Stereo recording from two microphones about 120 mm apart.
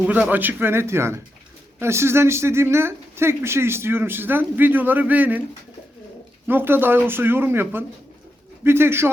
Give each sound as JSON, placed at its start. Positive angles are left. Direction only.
{"t": 0.0, "sound": "speech", "side_deg": -10}
{"t": 6.5, "sound": "speech", "side_deg": -15}